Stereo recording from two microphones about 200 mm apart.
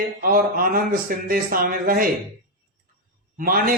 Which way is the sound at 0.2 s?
45° right (ahead or behind).